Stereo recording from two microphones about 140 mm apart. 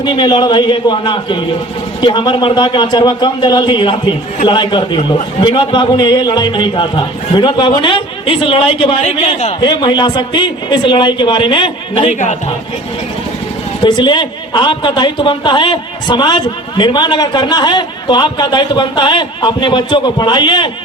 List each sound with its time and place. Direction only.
0.0 s speech: 35° left (ahead or behind); by 9.6 s 50° left (ahead or behind)
9.6 s speech: 30° left (ahead or behind)
13.8 s speech: 35° left (ahead or behind)